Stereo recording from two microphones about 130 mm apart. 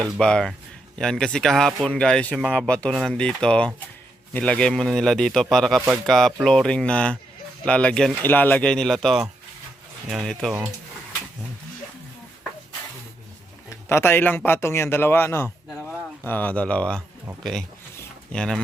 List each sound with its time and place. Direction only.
0.0 s speech: 5° left (ahead or behind)
13.7 s speech: 20° left (ahead or behind)